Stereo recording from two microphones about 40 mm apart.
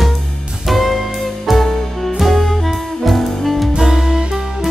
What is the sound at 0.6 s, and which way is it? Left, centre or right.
Music, centre.